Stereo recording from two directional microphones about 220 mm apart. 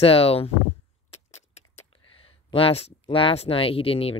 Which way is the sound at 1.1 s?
30° left (ahead or behind).